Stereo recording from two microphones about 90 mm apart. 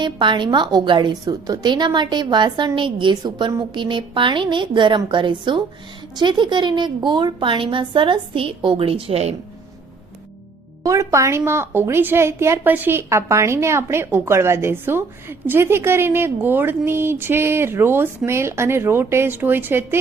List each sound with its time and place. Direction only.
0.0 s a woman's voice: 60° right (ahead or behind); by 9.1 s 90° right
10.8 s a woman's voice: 35° right (ahead or behind)